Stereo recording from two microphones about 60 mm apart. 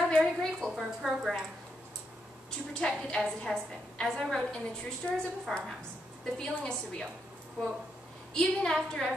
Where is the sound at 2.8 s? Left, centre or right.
Centre.